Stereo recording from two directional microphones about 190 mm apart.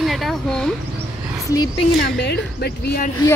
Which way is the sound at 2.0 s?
60° left (ahead or behind).